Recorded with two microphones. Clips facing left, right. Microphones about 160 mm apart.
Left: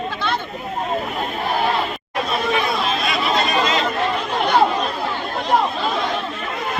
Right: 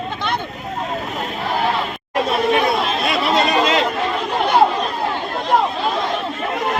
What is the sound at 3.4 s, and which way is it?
Chatter, 70° right (ahead or behind).